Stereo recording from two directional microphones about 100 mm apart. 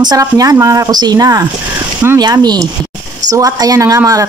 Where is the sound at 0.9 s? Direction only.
40° right (ahead or behind).